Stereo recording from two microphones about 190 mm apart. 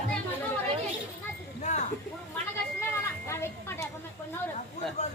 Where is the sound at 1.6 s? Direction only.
40° left (ahead or behind).